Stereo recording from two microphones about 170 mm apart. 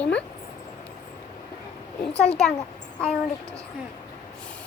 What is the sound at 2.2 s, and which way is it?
Speech, 40° left (ahead or behind).